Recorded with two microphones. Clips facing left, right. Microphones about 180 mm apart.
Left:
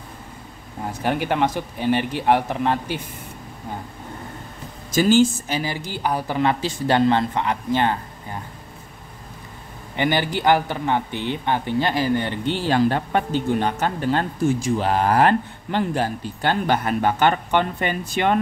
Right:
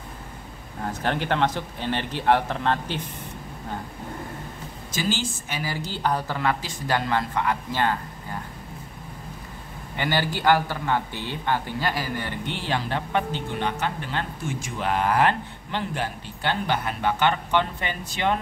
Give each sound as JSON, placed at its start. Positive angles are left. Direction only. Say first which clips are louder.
{"t": 0.8, "sound": "speech", "louder": "left 3 dB", "side_deg": 10}
{"t": 4.9, "sound": "speech", "louder": "left 12 dB", "side_deg": 45}
{"t": 5.5, "sound": "speech", "louder": "left 4 dB", "side_deg": 20}
{"t": 9.9, "sound": "speech", "louder": "left 4 dB", "side_deg": 20}